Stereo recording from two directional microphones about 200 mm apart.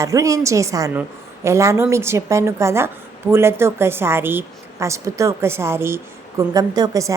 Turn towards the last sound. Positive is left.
turn(degrees=-15)  # may be behind; listen again after turning